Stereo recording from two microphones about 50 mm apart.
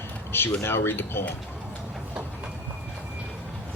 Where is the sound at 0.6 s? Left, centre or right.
Left.